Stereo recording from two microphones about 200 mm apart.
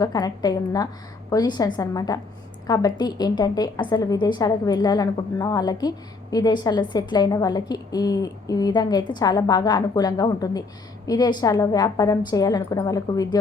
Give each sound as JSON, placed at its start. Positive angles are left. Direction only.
{"t": 0.0, "sound": "a woman's voice", "side_deg": 20}